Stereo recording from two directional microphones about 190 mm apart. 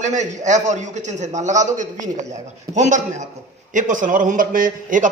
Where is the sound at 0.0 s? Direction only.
40° right (ahead or behind).